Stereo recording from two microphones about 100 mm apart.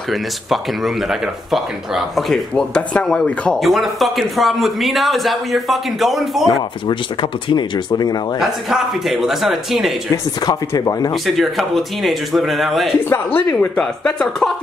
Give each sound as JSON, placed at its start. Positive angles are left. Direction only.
{"t": 0.1, "sound": "speech", "side_deg": 0}
{"t": 6.9, "sound": "speech", "side_deg": 50}
{"t": 8.4, "sound": "speech", "side_deg": -5}
{"t": 10.4, "sound": "speech", "side_deg": 40}
{"t": 11.2, "sound": "speech", "side_deg": 0}
{"t": 13.1, "sound": "speech", "side_deg": 20}
{"t": 14.0, "sound": "speech", "side_deg": 5}